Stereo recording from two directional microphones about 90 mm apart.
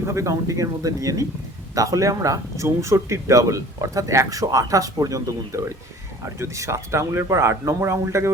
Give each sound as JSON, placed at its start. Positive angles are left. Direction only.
{"t": 0.0, "sound": "speech", "side_deg": -30}